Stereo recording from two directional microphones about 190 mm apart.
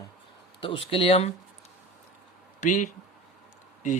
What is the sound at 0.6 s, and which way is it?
Speech, 25° left (ahead or behind).